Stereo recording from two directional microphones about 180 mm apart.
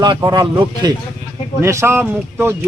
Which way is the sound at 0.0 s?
25° right (ahead or behind).